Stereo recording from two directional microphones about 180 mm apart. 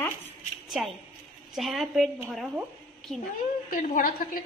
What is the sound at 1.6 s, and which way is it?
Speech, centre (ahead or behind).